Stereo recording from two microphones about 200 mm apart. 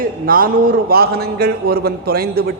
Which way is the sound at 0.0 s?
45° right (ahead or behind).